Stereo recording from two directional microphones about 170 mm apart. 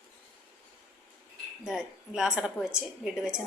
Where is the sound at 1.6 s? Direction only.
5° right (ahead or behind).